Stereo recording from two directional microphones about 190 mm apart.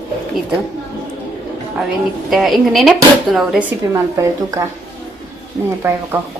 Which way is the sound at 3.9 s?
15° right (ahead or behind).